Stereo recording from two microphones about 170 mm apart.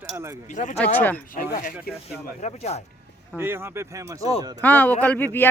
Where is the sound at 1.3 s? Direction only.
55° left (ahead or behind).